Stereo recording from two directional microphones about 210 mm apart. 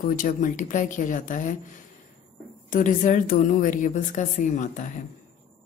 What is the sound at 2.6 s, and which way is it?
Speech, 40° left (ahead or behind).